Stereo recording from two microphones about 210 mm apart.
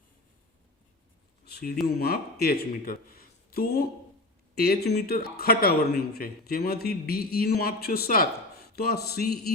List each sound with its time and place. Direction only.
1.5 s speech: 50° left (ahead or behind)